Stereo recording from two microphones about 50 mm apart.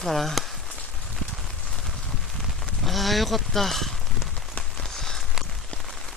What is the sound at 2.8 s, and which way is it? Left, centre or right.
Speech, centre.